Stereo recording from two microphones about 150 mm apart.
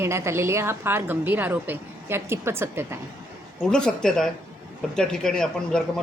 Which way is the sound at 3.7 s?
5° left (ahead or behind).